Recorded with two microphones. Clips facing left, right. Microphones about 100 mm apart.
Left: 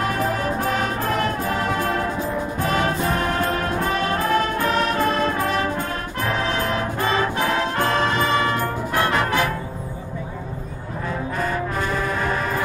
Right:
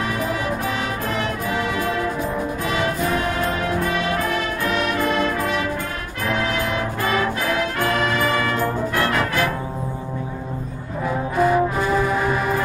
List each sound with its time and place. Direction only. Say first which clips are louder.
0.4 s music: left 2 dB; 40° left (ahead or behind); by 9.4 s 20° left (ahead or behind)
11.3 s music: right 9 dB; 15° right (ahead or behind)